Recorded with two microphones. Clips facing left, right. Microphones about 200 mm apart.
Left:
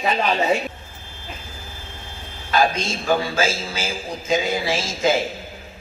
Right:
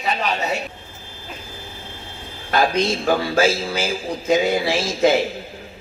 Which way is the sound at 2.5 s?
60° right (ahead or behind).